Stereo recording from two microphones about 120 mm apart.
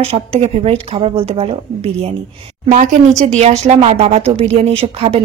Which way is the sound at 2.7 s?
90° right.